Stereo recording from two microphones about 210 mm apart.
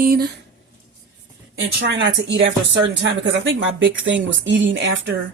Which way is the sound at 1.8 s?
55° right (ahead or behind).